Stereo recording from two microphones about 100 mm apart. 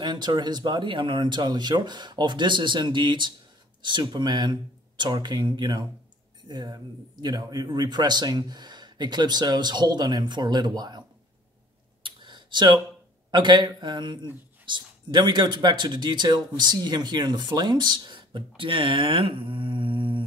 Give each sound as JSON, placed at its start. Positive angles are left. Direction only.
{"t": 0.0, "sound": "speech", "side_deg": -45}
{"t": 12.0, "sound": "a sound", "side_deg": -50}
{"t": 13.3, "sound": "speech", "side_deg": -50}